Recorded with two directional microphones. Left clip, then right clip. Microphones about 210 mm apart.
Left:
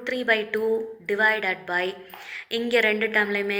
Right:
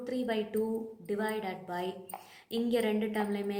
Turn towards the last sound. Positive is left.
turn(degrees=0)  # may be behind; listen again after turning